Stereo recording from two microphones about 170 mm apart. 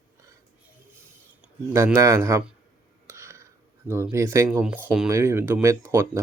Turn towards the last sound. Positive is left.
turn(degrees=-15)  # may be behind; listen again after turning